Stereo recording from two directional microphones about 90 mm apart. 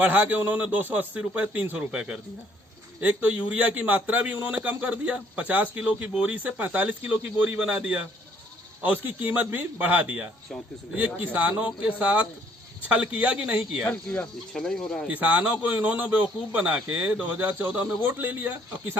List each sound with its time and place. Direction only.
0.0 s a man's voice: 15° right (ahead or behind)
13.9 s speech: 10° left (ahead or behind)
15.0 s a man's voice: 15° right (ahead or behind)